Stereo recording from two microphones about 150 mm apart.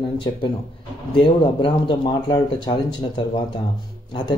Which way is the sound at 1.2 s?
35° left (ahead or behind).